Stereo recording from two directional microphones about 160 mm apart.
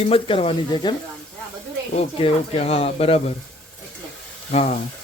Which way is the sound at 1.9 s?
40° left (ahead or behind).